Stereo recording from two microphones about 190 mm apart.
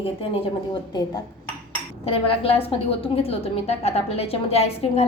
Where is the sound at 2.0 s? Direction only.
30° left (ahead or behind).